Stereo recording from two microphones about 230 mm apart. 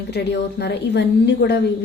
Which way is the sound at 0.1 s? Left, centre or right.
Left.